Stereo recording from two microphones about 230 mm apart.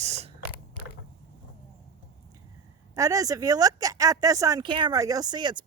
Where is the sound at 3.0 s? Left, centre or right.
Centre.